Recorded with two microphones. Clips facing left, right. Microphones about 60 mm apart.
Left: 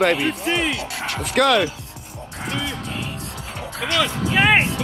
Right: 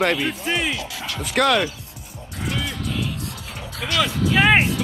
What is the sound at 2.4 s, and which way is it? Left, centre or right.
Music, left.